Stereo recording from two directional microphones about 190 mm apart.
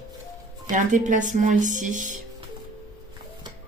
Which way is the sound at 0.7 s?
40° right (ahead or behind).